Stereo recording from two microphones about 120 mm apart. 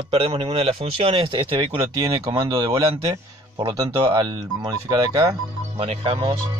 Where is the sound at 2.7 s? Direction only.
50° right (ahead or behind).